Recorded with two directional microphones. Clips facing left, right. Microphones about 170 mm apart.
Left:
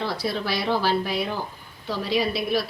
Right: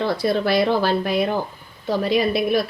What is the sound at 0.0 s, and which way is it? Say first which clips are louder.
A woman's voice: right 7 dB; 55° right (ahead or behind).